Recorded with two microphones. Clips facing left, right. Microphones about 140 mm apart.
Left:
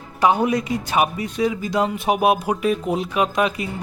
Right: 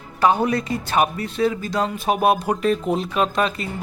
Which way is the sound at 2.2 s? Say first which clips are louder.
Right 1 dB; 5° left (ahead or behind).